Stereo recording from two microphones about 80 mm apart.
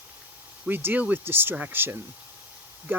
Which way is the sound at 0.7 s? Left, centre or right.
Right.